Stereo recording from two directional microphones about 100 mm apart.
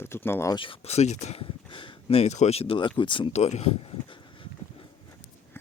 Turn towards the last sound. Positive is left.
turn(degrees=60)  # may be behind; listen again after turning